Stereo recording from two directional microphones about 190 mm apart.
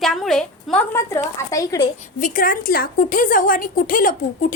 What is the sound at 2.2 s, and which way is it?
A woman's voice, 45° left (ahead or behind).